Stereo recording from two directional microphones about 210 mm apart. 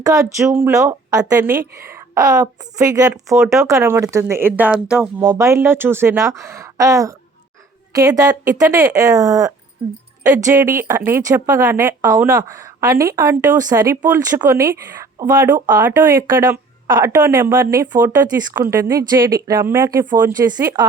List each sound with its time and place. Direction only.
0.0 s a woman's voice: 15° right (ahead or behind)